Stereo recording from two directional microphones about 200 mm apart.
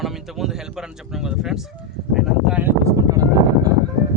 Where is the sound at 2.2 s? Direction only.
5° right (ahead or behind).